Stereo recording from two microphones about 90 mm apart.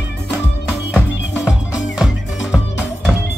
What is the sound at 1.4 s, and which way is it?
Music, 10° right (ahead or behind).